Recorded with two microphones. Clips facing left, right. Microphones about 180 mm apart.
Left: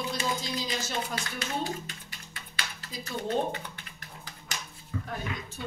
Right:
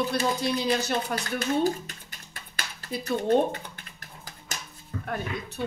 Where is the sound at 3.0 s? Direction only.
45° right (ahead or behind).